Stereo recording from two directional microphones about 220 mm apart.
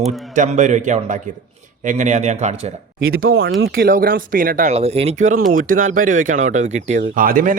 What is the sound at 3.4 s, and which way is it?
Speech, 50° right (ahead or behind).